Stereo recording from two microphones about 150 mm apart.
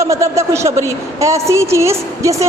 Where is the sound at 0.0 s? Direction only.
20° right (ahead or behind).